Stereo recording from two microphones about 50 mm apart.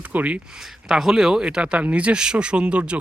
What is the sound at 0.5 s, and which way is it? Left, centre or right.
Speech, centre.